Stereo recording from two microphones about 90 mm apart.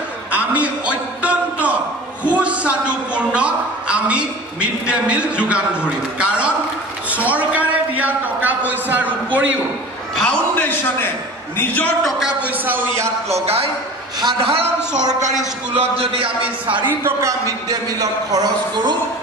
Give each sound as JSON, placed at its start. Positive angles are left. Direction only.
{"t": 0.3, "sound": "a sound", "side_deg": -15}
{"t": 10.2, "sound": "a sound", "side_deg": 20}
{"t": 11.5, "sound": "a man's voice", "side_deg": 20}
{"t": 12.0, "sound": "speech", "side_deg": -5}
{"t": 12.6, "sound": "a man's voice", "side_deg": -20}
{"t": 14.4, "sound": "a man's voice", "side_deg": -90}
{"t": 15.7, "sound": "a man's voice", "side_deg": -90}
{"t": 18.3, "sound": "speech", "side_deg": -50}